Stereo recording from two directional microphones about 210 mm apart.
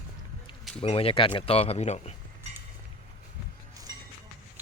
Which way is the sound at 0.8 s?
25° left (ahead or behind).